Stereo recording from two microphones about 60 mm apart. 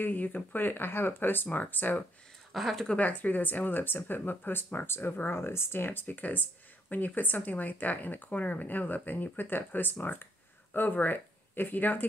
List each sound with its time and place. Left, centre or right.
0.0 s speech: left
2.5 s a woman's voice: centre
2.9 s speech: left